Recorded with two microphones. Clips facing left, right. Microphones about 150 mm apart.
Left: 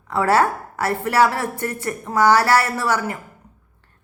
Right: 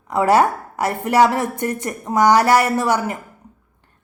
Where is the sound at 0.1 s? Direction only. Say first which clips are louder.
Right 2 dB; 15° right (ahead or behind).